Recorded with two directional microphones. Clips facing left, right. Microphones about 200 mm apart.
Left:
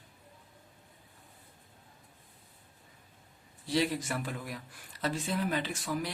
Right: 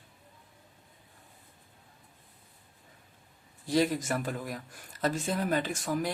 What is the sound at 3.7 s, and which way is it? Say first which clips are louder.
Speech: right 3 dB; 45° right (ahead or behind).